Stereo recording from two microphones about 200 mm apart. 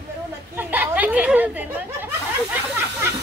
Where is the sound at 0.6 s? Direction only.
10° right (ahead or behind).